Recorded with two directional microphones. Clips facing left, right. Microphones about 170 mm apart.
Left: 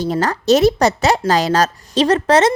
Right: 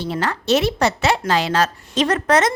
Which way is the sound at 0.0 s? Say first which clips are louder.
Left 5 dB; 40° left (ahead or behind).